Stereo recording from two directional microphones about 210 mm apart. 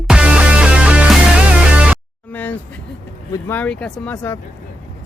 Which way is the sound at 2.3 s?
10° left (ahead or behind).